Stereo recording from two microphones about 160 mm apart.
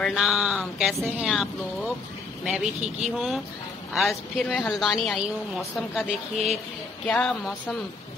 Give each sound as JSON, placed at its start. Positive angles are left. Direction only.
{"t": 0.0, "sound": "a woman's voice", "side_deg": 0}